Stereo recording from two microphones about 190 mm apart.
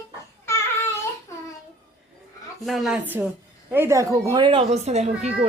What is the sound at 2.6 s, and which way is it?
Speech, centre (ahead or behind).